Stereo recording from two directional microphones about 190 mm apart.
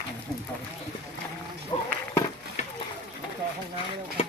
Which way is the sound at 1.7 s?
20° left (ahead or behind).